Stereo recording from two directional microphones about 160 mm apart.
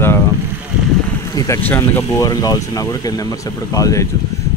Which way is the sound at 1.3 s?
20° left (ahead or behind).